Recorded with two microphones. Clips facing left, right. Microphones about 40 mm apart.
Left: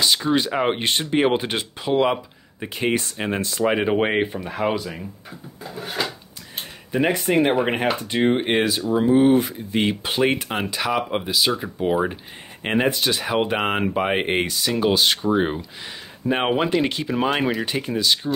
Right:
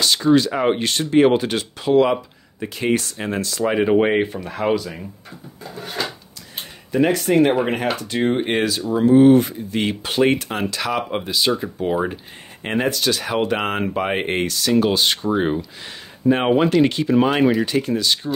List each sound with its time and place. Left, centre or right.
0.0 s speech: centre
6.9 s speech: centre
17.6 s speech: centre